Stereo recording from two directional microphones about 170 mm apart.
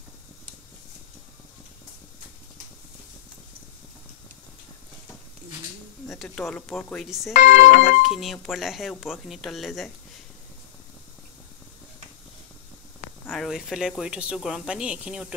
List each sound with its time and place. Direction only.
6.1 s speech: 5° left (ahead or behind)
7.3 s speech: 50° left (ahead or behind)
8.0 s speech: centre (ahead or behind)
13.3 s speech: centre (ahead or behind)